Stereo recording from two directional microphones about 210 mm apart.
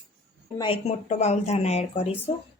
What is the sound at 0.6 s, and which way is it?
Speech, 30° left (ahead or behind).